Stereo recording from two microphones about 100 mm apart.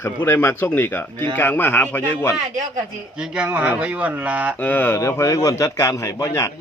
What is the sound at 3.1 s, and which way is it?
A man's voice, 10° right (ahead or behind).